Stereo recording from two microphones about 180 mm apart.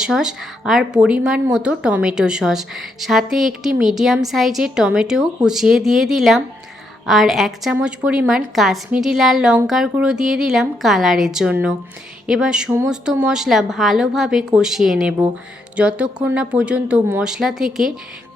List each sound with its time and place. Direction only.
0.0 s a woman's voice: 5° right (ahead or behind)